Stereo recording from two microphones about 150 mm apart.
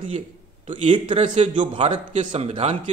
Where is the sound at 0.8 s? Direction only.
35° right (ahead or behind).